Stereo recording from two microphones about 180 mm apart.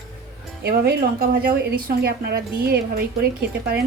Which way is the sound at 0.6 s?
60° right (ahead or behind).